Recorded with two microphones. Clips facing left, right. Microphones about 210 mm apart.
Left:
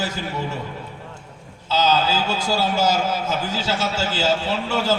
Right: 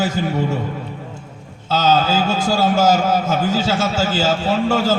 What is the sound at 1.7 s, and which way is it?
A man's voice, 50° right (ahead or behind).